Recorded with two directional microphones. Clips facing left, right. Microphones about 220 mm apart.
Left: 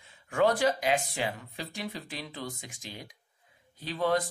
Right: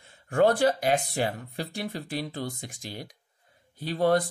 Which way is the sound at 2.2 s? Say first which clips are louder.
Right 6 dB; 35° right (ahead or behind).